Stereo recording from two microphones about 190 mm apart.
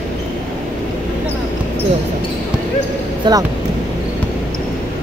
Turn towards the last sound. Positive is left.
turn(degrees=-25)  # may be behind; listen again after turning